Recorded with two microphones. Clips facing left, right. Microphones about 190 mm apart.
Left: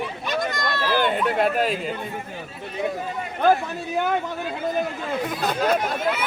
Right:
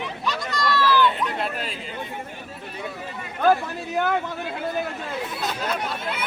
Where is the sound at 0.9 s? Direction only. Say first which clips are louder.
Left 3 dB; 55° left (ahead or behind).